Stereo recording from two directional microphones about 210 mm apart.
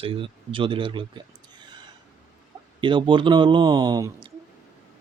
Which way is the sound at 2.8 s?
25° right (ahead or behind).